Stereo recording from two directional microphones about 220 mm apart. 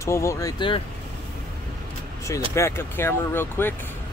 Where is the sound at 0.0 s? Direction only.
15° left (ahead or behind).